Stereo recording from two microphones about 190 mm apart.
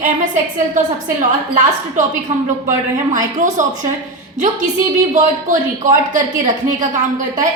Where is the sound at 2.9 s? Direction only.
40° right (ahead or behind).